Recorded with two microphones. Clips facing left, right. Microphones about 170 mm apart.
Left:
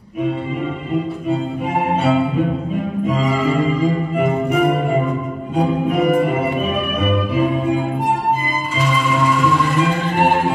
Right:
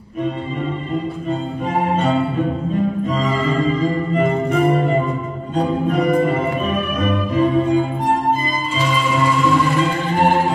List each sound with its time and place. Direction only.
3.1 s music: 10° left (ahead or behind)